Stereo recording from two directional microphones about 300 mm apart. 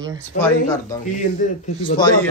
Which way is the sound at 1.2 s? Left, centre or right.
Left.